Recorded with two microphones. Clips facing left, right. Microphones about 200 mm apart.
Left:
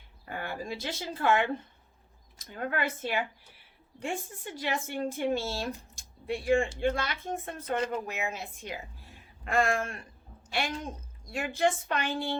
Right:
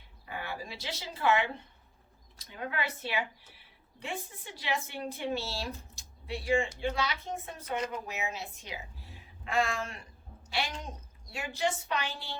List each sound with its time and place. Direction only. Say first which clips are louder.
0.3 s speech: left 4 dB; 50° left (ahead or behind)